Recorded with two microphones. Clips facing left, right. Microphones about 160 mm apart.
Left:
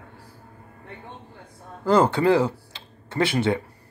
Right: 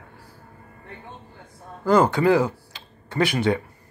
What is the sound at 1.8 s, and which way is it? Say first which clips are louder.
Speech: right 1 dB; 30° left (ahead or behind).